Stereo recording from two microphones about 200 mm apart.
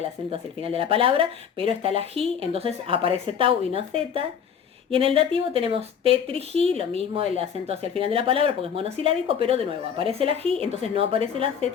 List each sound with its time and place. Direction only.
0.0 s speech: 30° right (ahead or behind)